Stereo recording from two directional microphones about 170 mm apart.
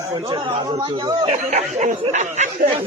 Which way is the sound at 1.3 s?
45° right (ahead or behind).